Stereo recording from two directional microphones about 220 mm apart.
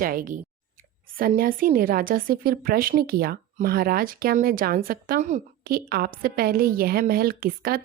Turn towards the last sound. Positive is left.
turn(degrees=-40)  # may be behind; listen again after turning